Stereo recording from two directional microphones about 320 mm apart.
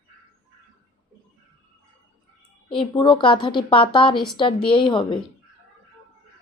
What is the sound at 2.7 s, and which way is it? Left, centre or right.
A woman's voice, centre.